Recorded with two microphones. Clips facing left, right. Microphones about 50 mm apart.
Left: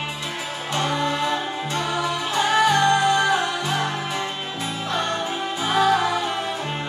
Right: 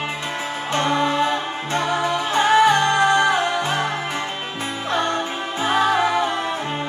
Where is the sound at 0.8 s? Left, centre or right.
Right.